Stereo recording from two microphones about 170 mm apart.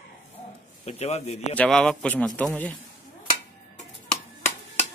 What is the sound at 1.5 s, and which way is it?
A man's voice, 5° left (ahead or behind).